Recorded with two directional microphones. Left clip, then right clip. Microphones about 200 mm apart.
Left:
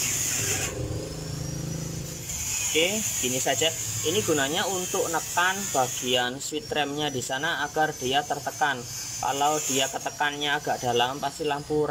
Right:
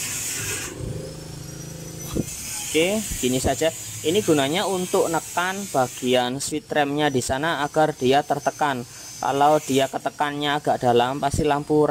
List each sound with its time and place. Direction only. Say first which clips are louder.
2.7 s speech: right 4 dB; 25° right (ahead or behind)